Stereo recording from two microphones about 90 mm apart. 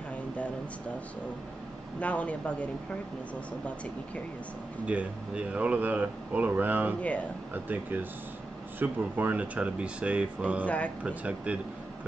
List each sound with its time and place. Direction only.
2.0 s speech: 15° left (ahead or behind)
4.8 s speech: 15° right (ahead or behind)
7.0 s speech: 15° left (ahead or behind)
7.5 s speech: 20° right (ahead or behind)